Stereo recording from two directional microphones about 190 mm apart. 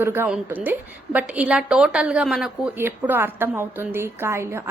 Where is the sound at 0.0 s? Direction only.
10° right (ahead or behind).